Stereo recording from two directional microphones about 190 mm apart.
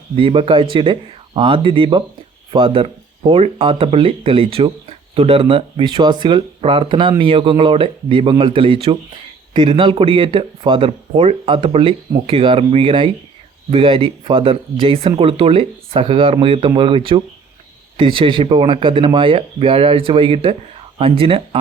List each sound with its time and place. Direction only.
0.2 s speech: 25° right (ahead or behind)